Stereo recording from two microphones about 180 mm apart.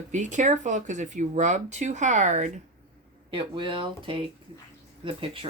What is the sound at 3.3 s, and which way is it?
Speech, 30° right (ahead or behind).